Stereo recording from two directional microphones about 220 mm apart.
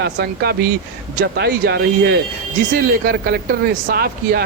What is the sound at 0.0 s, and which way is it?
Speech, 45° right (ahead or behind).